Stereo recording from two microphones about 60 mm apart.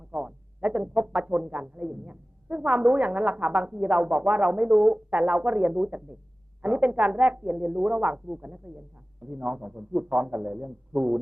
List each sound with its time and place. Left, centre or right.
0.1 s speech: right